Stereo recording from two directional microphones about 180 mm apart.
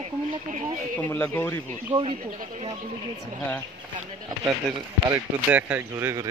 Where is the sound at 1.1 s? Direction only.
10° left (ahead or behind).